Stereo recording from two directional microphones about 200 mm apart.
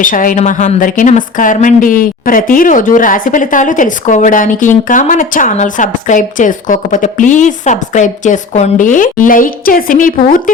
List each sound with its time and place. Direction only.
0.0 s a woman's voice: 40° left (ahead or behind)